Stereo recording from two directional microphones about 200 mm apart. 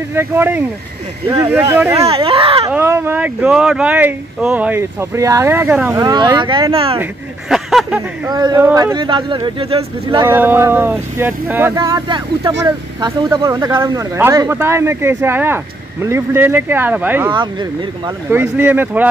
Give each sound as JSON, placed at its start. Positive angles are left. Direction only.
{"t": 0.1, "sound": "speech", "side_deg": -10}
{"t": 2.0, "sound": "speech", "side_deg": -25}
{"t": 2.7, "sound": "speech", "side_deg": -10}
{"t": 5.9, "sound": "speech", "side_deg": -20}
{"t": 7.0, "sound": "speech", "side_deg": 0}
{"t": 8.3, "sound": "speech", "side_deg": -20}
{"t": 10.2, "sound": "speech", "side_deg": -10}
{"t": 17.3, "sound": "speech", "side_deg": -25}
{"t": 18.3, "sound": "speech", "side_deg": -10}